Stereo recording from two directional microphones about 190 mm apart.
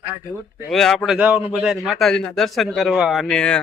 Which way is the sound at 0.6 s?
Centre (ahead or behind).